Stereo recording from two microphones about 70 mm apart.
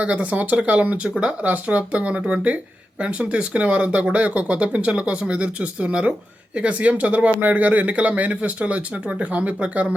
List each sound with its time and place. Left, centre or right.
0.0 s speech: centre